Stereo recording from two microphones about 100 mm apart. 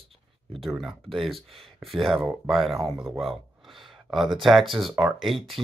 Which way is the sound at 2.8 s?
Centre (ahead or behind).